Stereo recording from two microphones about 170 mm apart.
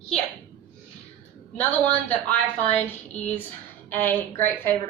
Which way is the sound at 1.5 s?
10° left (ahead or behind).